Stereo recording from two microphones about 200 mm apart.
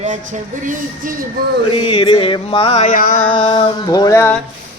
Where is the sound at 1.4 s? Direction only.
50° right (ahead or behind).